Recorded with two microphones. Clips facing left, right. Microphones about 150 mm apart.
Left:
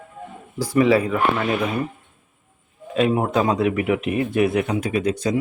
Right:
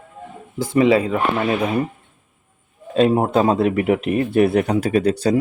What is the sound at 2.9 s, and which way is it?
A man's voice, 30° right (ahead or behind).